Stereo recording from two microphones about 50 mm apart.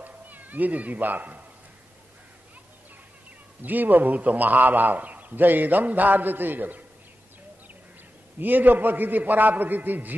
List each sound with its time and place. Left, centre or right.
0.0 s speech: right
3.6 s a man's voice: right
8.4 s a man's voice: right